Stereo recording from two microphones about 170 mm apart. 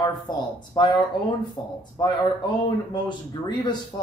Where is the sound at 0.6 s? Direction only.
25° left (ahead or behind).